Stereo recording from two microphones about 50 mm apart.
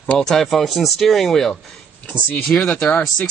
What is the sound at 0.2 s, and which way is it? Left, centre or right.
Speech, centre.